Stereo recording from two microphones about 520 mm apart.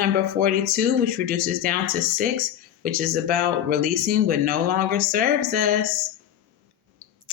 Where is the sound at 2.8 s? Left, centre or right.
Centre.